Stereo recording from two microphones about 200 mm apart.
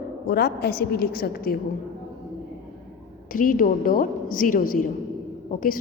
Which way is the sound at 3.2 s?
45° left (ahead or behind).